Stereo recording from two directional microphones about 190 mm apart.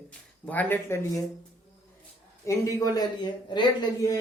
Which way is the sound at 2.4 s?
15° left (ahead or behind).